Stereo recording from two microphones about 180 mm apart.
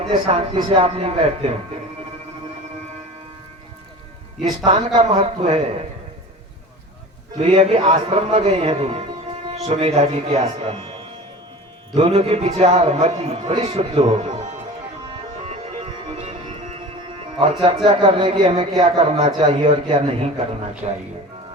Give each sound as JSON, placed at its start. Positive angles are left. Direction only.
{"t": 0.0, "sound": "a man's voice", "side_deg": -35}
{"t": 4.4, "sound": "a man's voice", "side_deg": -25}
{"t": 7.3, "sound": "a man's voice", "side_deg": -30}
{"t": 11.9, "sound": "a man's voice", "side_deg": -35}
{"t": 15.0, "sound": "music", "side_deg": -35}
{"t": 17.8, "sound": "a man's voice", "side_deg": -30}